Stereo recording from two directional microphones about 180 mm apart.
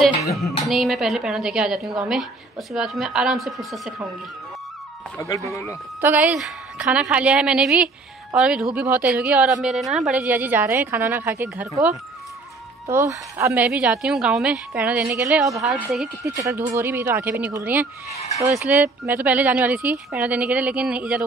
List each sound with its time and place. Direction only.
0.4 s a woman's voice: centre (ahead or behind)
5.1 s speech: 15° left (ahead or behind)
5.9 s a woman's voice: 10° right (ahead or behind)
12.8 s a woman's voice: 15° right (ahead or behind)
16.3 s a woman's voice: 15° right (ahead or behind)